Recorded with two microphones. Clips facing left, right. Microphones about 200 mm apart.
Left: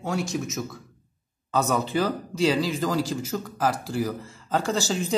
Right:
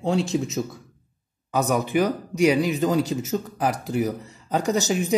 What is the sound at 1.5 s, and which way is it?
Speech, 15° right (ahead or behind).